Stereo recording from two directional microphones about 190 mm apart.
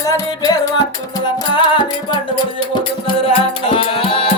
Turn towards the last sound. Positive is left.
turn(degrees=30)  # may be behind; listen again after turning